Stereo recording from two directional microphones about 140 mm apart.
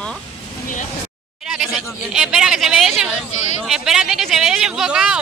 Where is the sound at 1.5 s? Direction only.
Centre (ahead or behind).